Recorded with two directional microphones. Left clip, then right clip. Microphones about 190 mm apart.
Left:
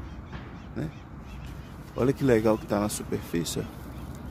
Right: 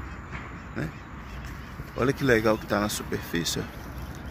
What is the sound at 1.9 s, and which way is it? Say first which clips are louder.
Speech: even; 20° left (ahead or behind).